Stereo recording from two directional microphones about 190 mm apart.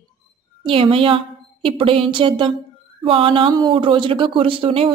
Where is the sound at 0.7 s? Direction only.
30° right (ahead or behind).